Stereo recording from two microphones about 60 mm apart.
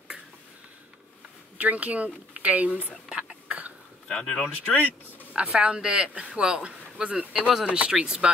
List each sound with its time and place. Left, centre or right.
1.6 s speech: right
3.1 s whispering: centre
4.1 s speech: centre
5.3 s speech: centre